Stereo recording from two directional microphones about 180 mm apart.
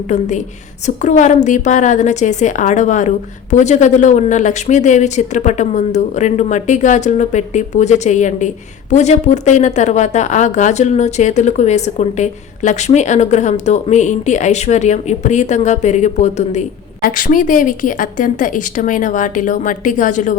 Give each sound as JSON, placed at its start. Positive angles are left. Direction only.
{"t": 0.1, "sound": "a woman's voice", "side_deg": 40}